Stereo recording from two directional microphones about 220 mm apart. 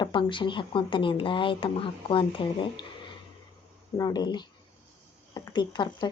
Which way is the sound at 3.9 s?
15° left (ahead or behind).